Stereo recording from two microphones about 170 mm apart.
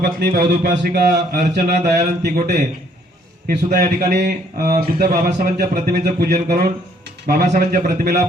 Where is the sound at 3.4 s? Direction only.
70° right (ahead or behind).